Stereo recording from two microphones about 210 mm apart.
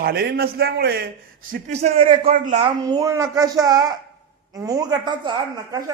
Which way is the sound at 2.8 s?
15° right (ahead or behind).